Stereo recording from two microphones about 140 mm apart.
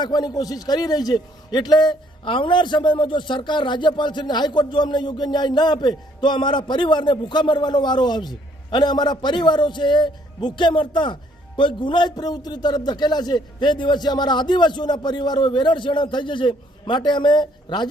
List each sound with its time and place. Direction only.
0.0 s a man's voice: 30° left (ahead or behind)